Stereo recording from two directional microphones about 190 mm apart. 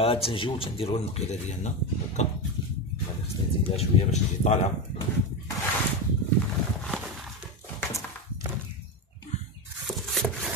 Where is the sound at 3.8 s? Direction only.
35° left (ahead or behind).